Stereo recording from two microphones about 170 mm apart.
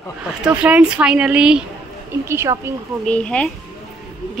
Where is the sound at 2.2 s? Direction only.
15° right (ahead or behind).